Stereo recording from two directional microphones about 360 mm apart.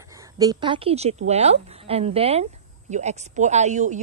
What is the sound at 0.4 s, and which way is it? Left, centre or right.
A woman's voice, centre.